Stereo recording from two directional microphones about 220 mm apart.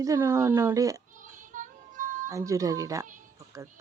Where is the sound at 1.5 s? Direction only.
35° right (ahead or behind).